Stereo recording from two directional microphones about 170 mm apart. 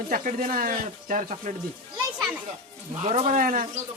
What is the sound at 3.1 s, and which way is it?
Speech, 45° right (ahead or behind).